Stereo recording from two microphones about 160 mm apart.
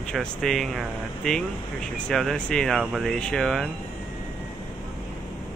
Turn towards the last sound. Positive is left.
turn(degrees=5)  # may be behind; listen again after turning